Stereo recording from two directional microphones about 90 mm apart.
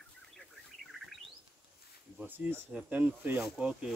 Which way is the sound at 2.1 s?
20° right (ahead or behind).